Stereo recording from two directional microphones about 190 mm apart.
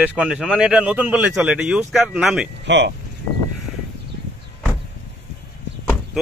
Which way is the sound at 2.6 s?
65° right (ahead or behind).